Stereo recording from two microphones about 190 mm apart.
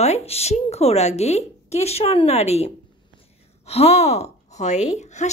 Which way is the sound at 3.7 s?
35° left (ahead or behind).